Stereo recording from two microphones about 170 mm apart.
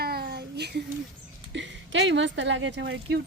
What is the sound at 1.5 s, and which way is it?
Speech, 90° right.